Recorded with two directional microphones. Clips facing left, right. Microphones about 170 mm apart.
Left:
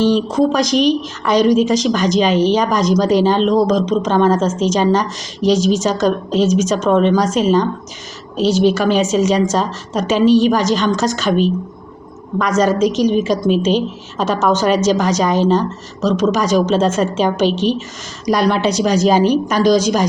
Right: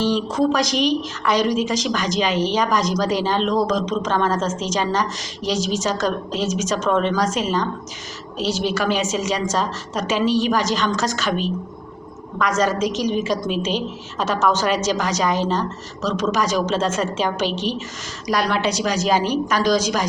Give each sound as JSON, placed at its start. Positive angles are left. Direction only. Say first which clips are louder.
{"t": 0.0, "sound": "a woman's voice", "louder": "left 5 dB", "side_deg": 20}
{"t": 12.5, "sound": "a woman's voice", "louder": "left 8 dB", "side_deg": 20}